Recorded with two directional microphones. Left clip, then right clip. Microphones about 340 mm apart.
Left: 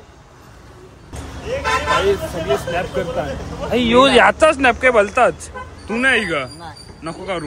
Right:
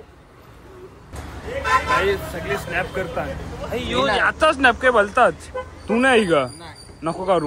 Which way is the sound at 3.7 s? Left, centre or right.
Left.